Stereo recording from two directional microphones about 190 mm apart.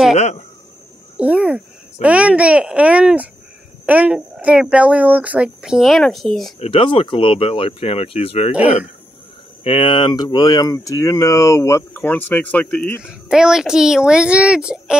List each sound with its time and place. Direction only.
1.2 s a child's voice: 5° right (ahead or behind)
6.6 s speech: 30° left (ahead or behind)
9.6 s speech: 30° left (ahead or behind); by 13.0 s 10° left (ahead or behind)
13.3 s a child's voice: 5° right (ahead or behind)